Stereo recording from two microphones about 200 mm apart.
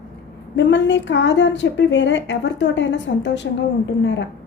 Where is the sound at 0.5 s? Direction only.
65° left (ahead or behind).